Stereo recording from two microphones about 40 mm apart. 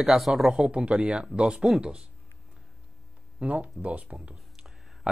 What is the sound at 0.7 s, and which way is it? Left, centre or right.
Speech, right.